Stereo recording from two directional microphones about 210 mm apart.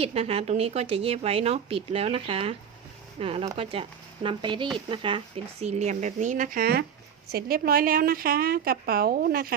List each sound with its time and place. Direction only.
0.0 s a woman's voice: 30° right (ahead or behind); by 9.6 s 45° right (ahead or behind)